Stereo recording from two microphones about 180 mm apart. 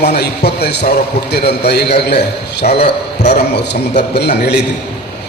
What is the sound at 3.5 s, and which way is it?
A man's voice, 70° left (ahead or behind).